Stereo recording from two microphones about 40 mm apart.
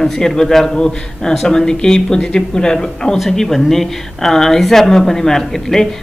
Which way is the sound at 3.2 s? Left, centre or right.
Centre.